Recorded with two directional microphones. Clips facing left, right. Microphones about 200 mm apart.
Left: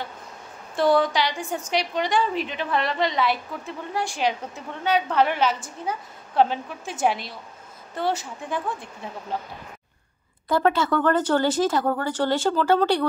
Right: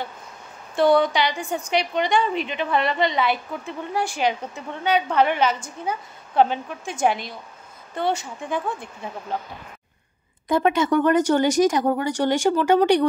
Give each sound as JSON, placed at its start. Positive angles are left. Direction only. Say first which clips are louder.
{"t": 0.7, "sound": "a woman's voice", "louder": "right 2 dB", "side_deg": 0}
{"t": 10.5, "sound": "speech", "louder": "right 2 dB", "side_deg": -15}